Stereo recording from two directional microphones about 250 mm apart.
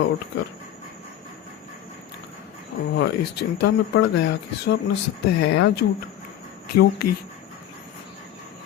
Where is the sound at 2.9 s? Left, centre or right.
Left.